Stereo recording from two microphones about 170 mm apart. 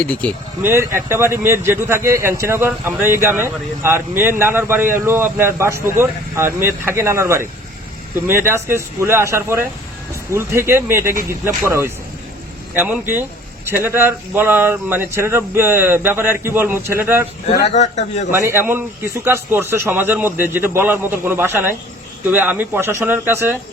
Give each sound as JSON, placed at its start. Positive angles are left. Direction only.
{"t": 0.0, "sound": "speech", "side_deg": 5}
{"t": 0.6, "sound": "speech", "side_deg": -15}
{"t": 8.4, "sound": "speech", "side_deg": -15}
{"t": 17.7, "sound": "speech", "side_deg": 45}
{"t": 18.3, "sound": "speech", "side_deg": -15}